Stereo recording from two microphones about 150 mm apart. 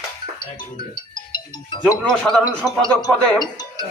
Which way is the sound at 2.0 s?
5° left (ahead or behind).